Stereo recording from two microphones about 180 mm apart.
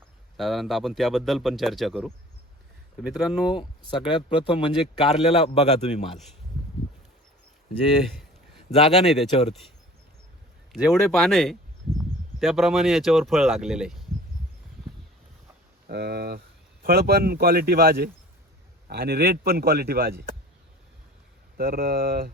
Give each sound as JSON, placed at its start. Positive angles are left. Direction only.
{"t": 0.3, "sound": "speech", "side_deg": 0}
{"t": 3.5, "sound": "speech", "side_deg": 25}
{"t": 8.7, "sound": "speech", "side_deg": 35}
{"t": 9.0, "sound": "speech", "side_deg": 0}
{"t": 9.3, "sound": "speech", "side_deg": 35}
{"t": 10.7, "sound": "speech", "side_deg": 0}
{"t": 15.9, "sound": "a man's voice", "side_deg": -60}
{"t": 21.6, "sound": "a man's voice", "side_deg": -55}